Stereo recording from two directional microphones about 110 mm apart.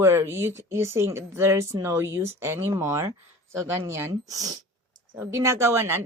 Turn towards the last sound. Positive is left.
turn(degrees=-25)  # may be behind; listen again after turning